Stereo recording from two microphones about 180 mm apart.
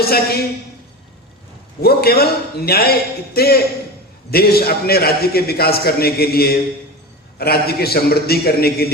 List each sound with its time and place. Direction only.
0.0 s a man's voice: 60° left (ahead or behind)
1.8 s a man's voice: 60° left (ahead or behind)